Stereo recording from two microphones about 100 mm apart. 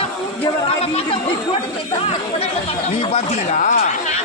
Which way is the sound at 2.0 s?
85° left.